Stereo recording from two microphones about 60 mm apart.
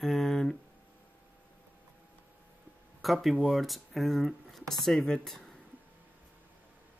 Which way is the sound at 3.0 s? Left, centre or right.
Centre.